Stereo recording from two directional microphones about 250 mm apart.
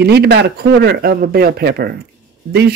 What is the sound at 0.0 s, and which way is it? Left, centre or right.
Speech, right.